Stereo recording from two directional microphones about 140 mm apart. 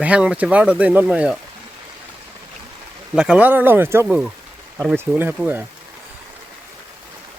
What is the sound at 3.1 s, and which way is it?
Speech, 5° right (ahead or behind).